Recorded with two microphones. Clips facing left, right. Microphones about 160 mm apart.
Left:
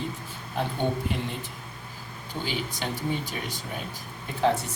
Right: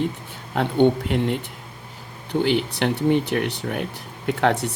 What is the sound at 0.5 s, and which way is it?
Speech, 65° right (ahead or behind).